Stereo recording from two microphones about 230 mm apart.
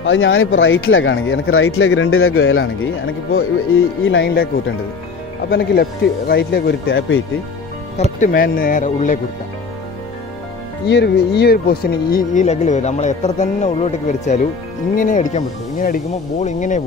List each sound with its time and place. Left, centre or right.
0.0 s speech: left
5.5 s speech: left
8.0 s speech: left
10.9 s speech: left